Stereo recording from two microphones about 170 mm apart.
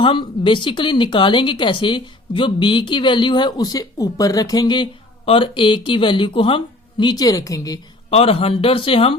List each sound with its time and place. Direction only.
0.0 s speech: 30° left (ahead or behind)
8.1 s speech: 35° left (ahead or behind)